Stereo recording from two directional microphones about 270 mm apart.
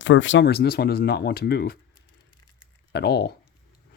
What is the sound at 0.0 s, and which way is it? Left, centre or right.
Speech, left.